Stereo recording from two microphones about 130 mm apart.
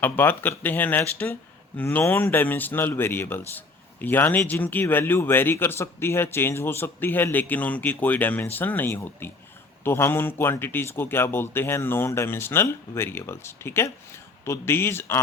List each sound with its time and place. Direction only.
0.0 s a man's voice: 15° left (ahead or behind)